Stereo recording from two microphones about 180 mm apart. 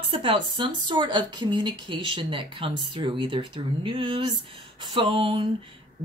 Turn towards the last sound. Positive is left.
turn(degrees=-30)  # may be behind; listen again after turning